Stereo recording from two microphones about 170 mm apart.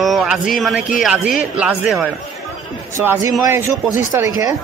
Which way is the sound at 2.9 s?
15° right (ahead or behind).